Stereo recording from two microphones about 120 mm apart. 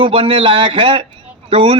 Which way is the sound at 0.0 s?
45° right (ahead or behind).